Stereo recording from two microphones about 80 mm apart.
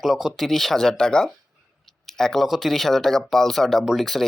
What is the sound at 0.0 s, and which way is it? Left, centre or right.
Speech, centre.